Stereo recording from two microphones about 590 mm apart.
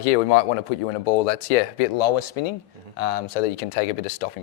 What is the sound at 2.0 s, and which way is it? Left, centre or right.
Speech, left.